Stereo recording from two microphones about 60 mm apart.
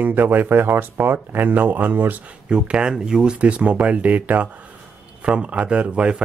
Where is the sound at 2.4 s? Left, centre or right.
Centre.